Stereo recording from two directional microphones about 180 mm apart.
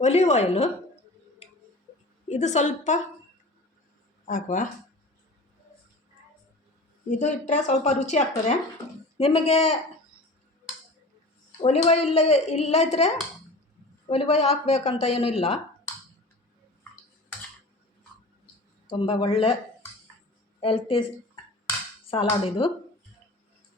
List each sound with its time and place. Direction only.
0.0 s a woman's voice: 35° left (ahead or behind)
2.2 s a woman's voice: 40° left (ahead or behind)
4.3 s speech: 50° left (ahead or behind)
7.1 s a woman's voice: 45° left (ahead or behind)
11.6 s a woman's voice: 35° left (ahead or behind)
18.9 s a woman's voice: 30° left (ahead or behind)
20.6 s speech: 30° left (ahead or behind)
22.1 s speech: 30° left (ahead or behind)